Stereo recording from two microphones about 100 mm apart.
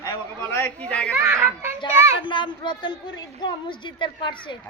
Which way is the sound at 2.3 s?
50° left (ahead or behind).